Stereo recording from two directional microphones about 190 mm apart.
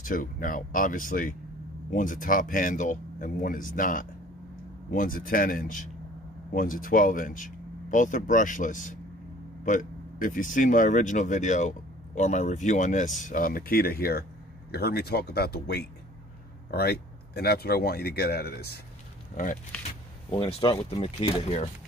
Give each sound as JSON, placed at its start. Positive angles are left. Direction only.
{"t": 0.0, "sound": "speech", "side_deg": 45}
{"t": 20.2, "sound": "speech", "side_deg": 30}